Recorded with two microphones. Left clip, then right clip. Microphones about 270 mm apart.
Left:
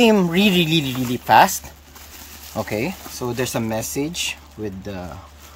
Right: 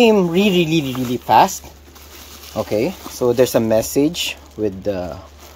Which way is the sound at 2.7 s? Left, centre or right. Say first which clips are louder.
Right 6 dB; left.